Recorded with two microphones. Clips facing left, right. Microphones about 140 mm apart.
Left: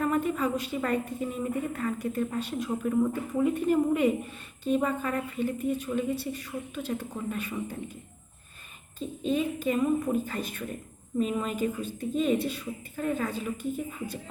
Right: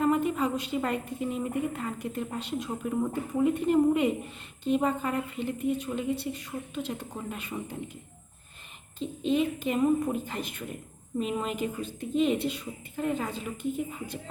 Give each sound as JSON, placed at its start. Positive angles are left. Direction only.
{"t": 0.0, "sound": "a woman's voice", "side_deg": -20}
{"t": 9.0, "sound": "a woman's voice", "side_deg": -20}